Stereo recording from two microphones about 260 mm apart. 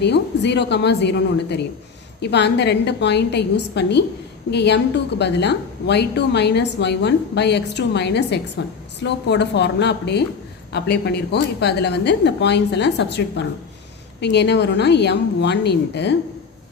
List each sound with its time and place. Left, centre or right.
0.0 s a woman's voice: left